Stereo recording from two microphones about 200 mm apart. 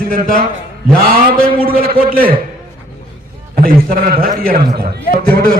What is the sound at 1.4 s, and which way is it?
Speech, 45° right (ahead or behind).